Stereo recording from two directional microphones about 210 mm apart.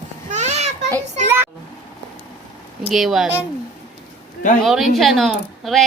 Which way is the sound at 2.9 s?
Centre (ahead or behind).